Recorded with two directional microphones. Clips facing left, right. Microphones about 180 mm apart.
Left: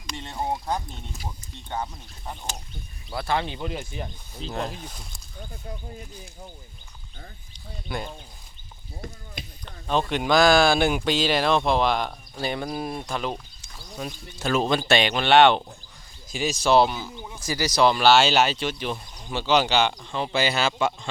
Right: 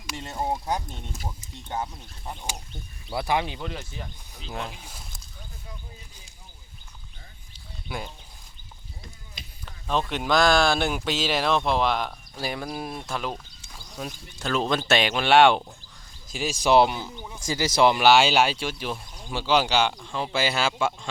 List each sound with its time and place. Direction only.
0.1 s speech: 5° right (ahead or behind)
1.7 s speech: 5° right (ahead or behind)
3.6 s speech: 10° left (ahead or behind)
4.4 s speech: 5° right (ahead or behind)
7.9 s speech: 10° right (ahead or behind)
9.6 s speech: centre (ahead or behind)